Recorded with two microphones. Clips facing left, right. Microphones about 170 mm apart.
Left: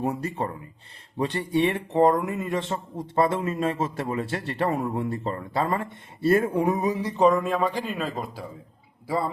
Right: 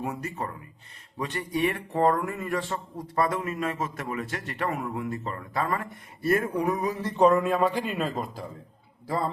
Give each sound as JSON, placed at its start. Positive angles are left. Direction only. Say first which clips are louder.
{"t": 0.0, "sound": "a man's voice", "louder": "left 5 dB", "side_deg": 30}
{"t": 7.2, "sound": "a man's voice", "louder": "right 1 dB", "side_deg": 0}